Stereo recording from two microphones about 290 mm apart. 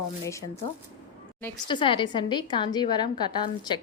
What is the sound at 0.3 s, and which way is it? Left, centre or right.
A woman's voice, centre.